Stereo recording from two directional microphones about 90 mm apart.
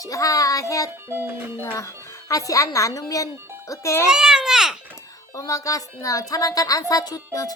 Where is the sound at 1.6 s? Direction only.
35° left (ahead or behind).